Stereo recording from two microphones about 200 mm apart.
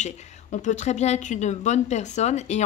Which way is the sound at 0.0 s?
40° left (ahead or behind).